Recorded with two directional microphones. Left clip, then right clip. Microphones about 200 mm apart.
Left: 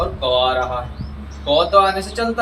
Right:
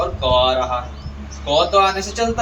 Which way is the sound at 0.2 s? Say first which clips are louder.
Right 1 dB; 20° left (ahead or behind).